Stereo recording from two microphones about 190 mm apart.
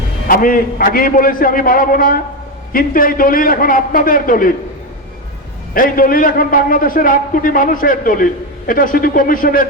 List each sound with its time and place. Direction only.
0.3 s a man's voice: 50° left (ahead or behind)
5.7 s a man's voice: 50° left (ahead or behind)